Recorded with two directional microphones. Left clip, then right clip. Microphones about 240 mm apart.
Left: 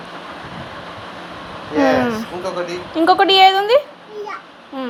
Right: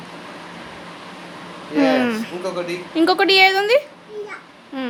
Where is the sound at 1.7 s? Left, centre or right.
Centre.